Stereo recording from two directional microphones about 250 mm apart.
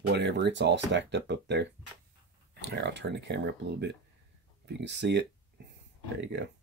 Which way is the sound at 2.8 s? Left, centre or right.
Right.